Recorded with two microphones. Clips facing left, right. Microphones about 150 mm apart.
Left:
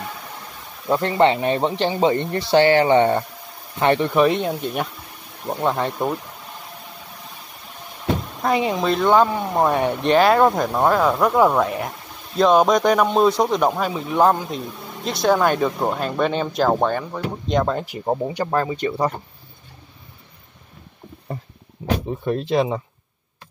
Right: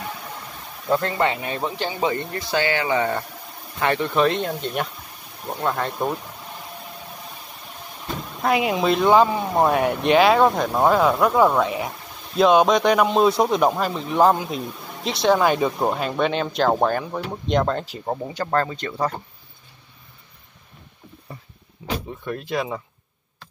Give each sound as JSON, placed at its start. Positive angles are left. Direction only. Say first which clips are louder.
{"t": 0.8, "sound": "speech", "louder": "left 4 dB", "side_deg": 20}
{"t": 8.6, "sound": "speech", "louder": "right 2 dB", "side_deg": -5}
{"t": 21.8, "sound": "a sound", "louder": "left 5 dB", "side_deg": 35}
{"t": 22.2, "sound": "speech", "louder": "left 7 dB", "side_deg": 30}